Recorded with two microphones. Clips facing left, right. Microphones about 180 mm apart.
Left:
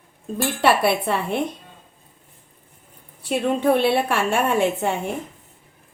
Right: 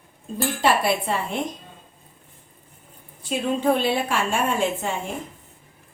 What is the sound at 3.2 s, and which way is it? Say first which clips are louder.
A woman's voice: left 2 dB; 65° left (ahead or behind).